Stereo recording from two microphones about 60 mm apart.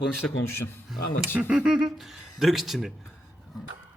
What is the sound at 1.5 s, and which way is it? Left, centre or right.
Speech, centre.